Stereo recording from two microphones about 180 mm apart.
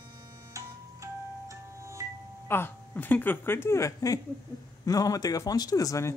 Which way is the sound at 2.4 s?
10° left (ahead or behind).